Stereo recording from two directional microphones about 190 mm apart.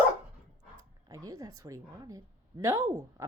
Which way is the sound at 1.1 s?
20° right (ahead or behind).